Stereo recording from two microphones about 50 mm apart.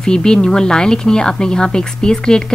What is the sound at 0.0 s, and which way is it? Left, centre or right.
A woman's voice, centre.